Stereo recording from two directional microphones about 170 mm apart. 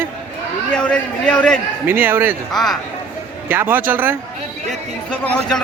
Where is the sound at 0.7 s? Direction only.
5° left (ahead or behind).